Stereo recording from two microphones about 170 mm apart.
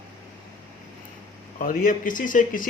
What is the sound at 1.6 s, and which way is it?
Speech, 55° left (ahead or behind).